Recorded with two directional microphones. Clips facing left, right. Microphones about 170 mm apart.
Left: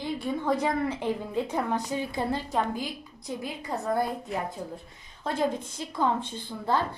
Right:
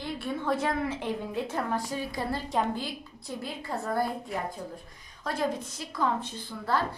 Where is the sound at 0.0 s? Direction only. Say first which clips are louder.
Left 3 dB; 15° left (ahead or behind).